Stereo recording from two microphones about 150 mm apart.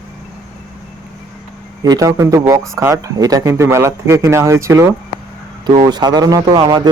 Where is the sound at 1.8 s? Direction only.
25° right (ahead or behind).